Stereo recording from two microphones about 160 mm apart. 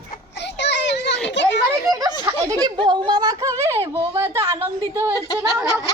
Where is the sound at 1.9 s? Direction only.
20° right (ahead or behind).